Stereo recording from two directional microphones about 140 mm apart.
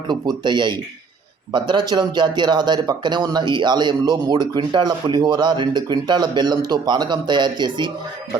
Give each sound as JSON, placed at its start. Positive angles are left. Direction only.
{"t": 0.1, "sound": "speech", "side_deg": -30}